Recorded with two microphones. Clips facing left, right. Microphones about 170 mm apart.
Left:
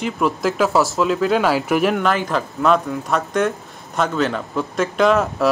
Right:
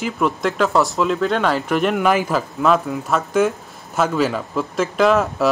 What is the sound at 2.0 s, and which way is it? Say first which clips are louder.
Speech: right 2 dB; 10° right (ahead or behind).